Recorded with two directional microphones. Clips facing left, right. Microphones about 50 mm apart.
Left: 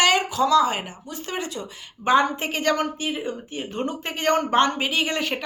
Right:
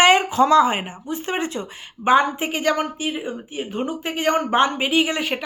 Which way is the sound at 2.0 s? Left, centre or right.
Centre.